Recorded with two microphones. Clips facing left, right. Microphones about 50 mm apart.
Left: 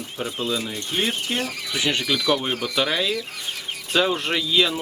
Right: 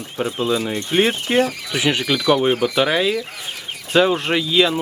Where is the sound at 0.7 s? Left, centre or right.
Right.